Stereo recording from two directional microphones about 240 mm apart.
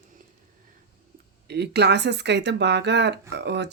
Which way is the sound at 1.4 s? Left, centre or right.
Right.